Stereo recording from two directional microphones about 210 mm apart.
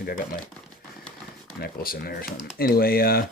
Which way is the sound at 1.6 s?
45° left (ahead or behind).